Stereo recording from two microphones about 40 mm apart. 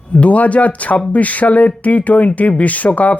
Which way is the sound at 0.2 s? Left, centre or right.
Left.